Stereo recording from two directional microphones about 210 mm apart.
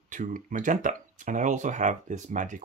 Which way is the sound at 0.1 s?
35° right (ahead or behind).